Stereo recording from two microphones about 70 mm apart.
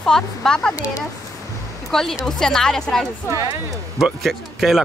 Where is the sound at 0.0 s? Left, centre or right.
Centre.